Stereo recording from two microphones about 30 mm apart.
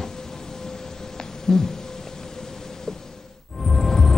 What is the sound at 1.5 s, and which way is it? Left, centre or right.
Speech, centre.